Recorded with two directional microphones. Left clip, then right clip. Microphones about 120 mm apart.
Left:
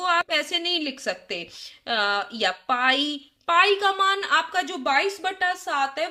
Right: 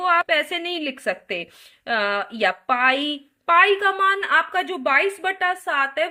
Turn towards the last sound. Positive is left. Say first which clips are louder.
# right 3 dB
turn(degrees=-35)  # may be behind; listen again after turning